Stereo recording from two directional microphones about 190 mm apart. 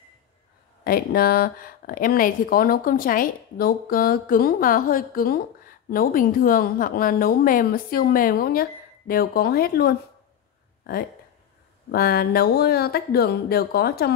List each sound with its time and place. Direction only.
0.8 s speech: 50° left (ahead or behind)
11.9 s speech: 55° left (ahead or behind)